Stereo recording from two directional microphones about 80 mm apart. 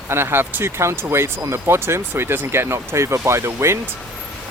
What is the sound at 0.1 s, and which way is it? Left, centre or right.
Speech, right.